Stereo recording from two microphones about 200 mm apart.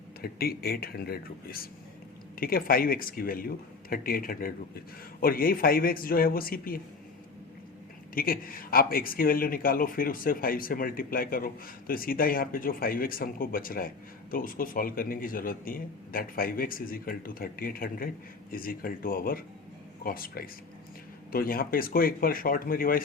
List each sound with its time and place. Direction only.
0.2 s speech: 50° left (ahead or behind)
8.1 s speech: 45° left (ahead or behind)